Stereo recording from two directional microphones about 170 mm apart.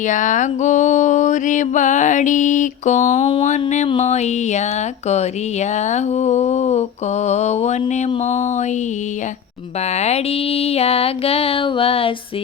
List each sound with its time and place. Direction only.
0.1 s mantra: 45° left (ahead or behind)
3.8 s speech: 40° left (ahead or behind)
10.0 s speech: 40° left (ahead or behind)